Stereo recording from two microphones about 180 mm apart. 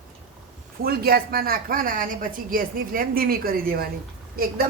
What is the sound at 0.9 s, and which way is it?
A woman's voice, 60° right (ahead or behind).